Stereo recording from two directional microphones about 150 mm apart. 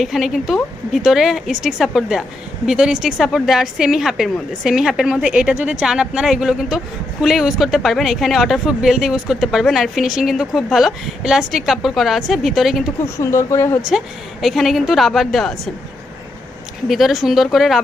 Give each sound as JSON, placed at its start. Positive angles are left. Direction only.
{"t": 0.0, "sound": "a woman's voice", "side_deg": 0}
{"t": 13.1, "sound": "speech", "side_deg": 20}
{"t": 14.4, "sound": "a woman's voice", "side_deg": 0}
{"t": 16.9, "sound": "a woman's voice", "side_deg": 0}